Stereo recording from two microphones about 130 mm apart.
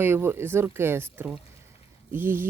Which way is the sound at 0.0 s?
20° right (ahead or behind).